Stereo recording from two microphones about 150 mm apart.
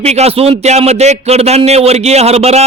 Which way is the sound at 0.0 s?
45° right (ahead or behind).